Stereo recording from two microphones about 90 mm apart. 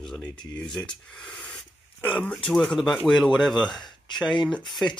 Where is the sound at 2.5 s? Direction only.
Centre (ahead or behind).